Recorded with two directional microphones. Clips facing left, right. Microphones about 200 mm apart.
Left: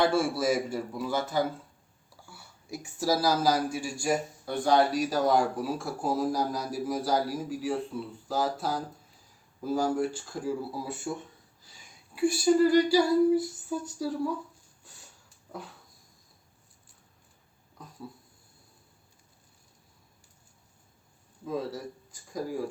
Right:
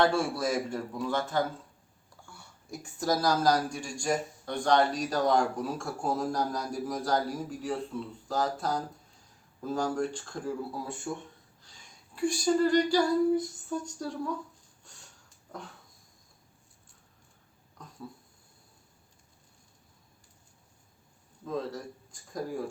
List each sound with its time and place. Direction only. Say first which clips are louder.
0.0 s speech: left 1 dB; 5° left (ahead or behind)
11.6 s a sound: left 1 dB; 5° left (ahead or behind)
21.4 s speech: left 1 dB; 5° left (ahead or behind)